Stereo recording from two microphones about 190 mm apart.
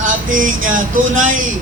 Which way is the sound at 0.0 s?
45° right (ahead or behind).